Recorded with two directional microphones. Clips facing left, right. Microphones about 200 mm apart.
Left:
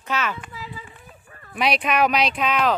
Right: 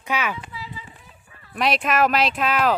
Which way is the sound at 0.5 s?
45° left (ahead or behind).